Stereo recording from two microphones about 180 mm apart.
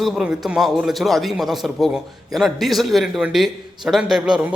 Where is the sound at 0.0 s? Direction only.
Centre (ahead or behind).